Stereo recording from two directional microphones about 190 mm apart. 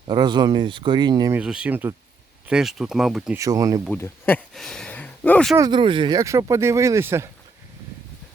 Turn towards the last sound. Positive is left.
turn(degrees=-15)  # may be behind; listen again after turning